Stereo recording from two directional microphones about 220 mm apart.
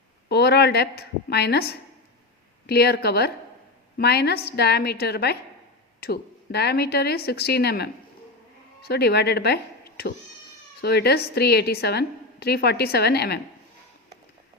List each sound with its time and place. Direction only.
0.3 s a woman's voice: 50° left (ahead or behind)
8.9 s a woman's voice: 45° left (ahead or behind)